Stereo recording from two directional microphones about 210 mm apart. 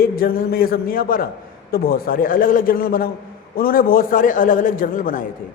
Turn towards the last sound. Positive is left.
turn(degrees=40)  # may be behind; listen again after turning